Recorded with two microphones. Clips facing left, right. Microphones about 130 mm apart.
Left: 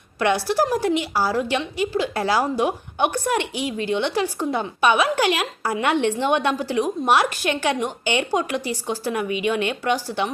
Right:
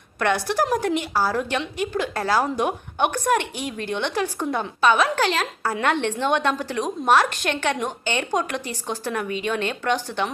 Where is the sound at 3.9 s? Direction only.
10° left (ahead or behind).